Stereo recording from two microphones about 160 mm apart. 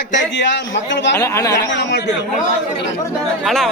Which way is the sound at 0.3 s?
90° left.